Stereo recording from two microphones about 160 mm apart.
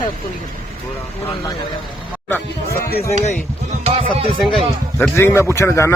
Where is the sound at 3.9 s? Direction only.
40° right (ahead or behind).